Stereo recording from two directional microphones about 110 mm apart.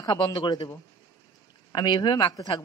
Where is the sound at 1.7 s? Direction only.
40° left (ahead or behind).